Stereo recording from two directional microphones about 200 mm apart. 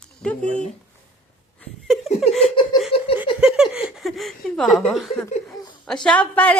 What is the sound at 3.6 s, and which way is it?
A woman's voice, 5° right (ahead or behind).